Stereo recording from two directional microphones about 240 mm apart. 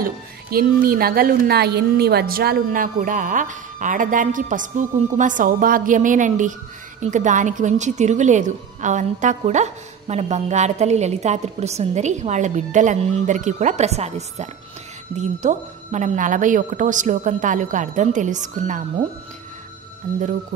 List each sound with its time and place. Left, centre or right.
0.0 s a woman's voice: right